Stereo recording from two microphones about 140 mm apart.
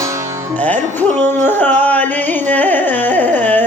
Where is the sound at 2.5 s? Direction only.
10° left (ahead or behind).